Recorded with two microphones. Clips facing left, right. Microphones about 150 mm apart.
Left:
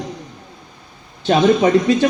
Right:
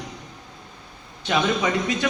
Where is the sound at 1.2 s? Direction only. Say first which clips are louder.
Left 9 dB; 35° left (ahead or behind).